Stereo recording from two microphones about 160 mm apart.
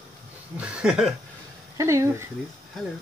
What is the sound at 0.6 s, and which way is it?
Speech, 5° right (ahead or behind).